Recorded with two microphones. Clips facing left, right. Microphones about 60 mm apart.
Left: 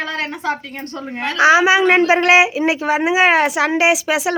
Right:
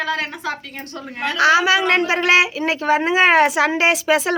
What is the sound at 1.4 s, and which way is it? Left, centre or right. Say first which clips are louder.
Speech: left 3 dB; left.